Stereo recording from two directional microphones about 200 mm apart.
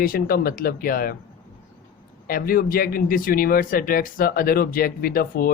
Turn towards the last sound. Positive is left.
turn(degrees=45)  # may be behind; listen again after turning